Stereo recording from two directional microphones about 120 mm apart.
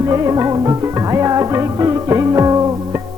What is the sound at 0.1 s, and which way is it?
Music, 25° right (ahead or behind).